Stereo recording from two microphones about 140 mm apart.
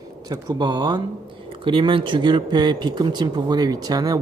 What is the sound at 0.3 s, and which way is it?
Speech, 30° right (ahead or behind).